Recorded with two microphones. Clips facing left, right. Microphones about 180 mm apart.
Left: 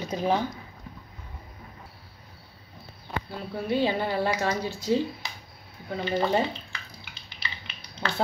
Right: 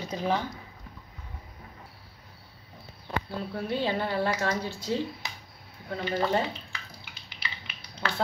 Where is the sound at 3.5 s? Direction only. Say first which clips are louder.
Left 4 dB; 10° left (ahead or behind).